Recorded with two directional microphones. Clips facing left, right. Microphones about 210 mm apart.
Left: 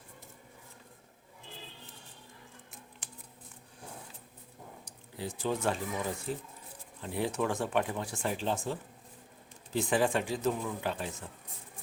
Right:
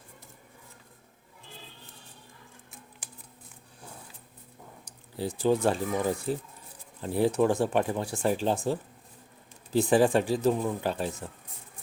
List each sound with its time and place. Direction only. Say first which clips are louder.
5.1 s speech: right 8 dB; 35° right (ahead or behind)